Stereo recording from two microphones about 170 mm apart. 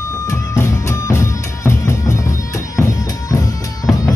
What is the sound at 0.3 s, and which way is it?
Music, 15° left (ahead or behind).